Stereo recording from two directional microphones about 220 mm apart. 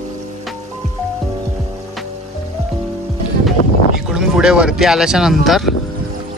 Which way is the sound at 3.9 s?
Centre (ahead or behind).